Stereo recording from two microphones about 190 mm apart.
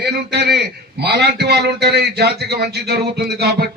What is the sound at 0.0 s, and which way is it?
A man's voice, 60° right (ahead or behind).